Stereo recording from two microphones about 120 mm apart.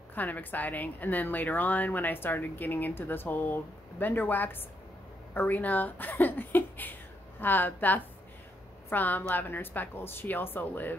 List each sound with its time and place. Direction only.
0.1 s a woman's voice: 15° left (ahead or behind)